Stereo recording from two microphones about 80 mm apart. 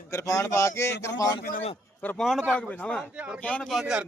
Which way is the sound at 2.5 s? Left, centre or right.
Centre.